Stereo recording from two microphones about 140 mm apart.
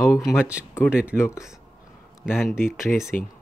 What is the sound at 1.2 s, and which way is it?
Speech, 20° left (ahead or behind).